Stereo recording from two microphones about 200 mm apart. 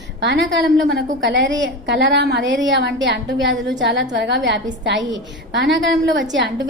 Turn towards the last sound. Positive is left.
turn(degrees=-65)  # may be behind; listen again after turning